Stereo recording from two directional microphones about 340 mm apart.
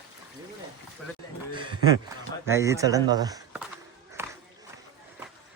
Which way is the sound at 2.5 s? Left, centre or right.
Centre.